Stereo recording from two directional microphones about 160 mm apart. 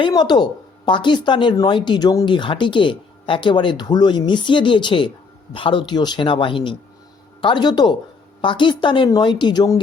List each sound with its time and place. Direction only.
0.0 s speech: 25° left (ahead or behind)